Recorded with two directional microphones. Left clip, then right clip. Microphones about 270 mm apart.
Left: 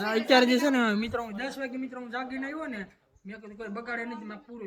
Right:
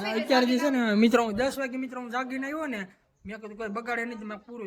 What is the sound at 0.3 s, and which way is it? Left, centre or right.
Speech, centre.